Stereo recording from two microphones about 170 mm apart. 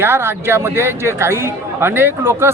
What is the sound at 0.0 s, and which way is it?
A man's voice, 15° right (ahead or behind).